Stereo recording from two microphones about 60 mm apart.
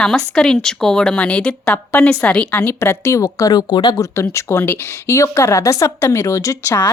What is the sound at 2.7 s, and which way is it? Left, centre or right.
A woman's voice, left.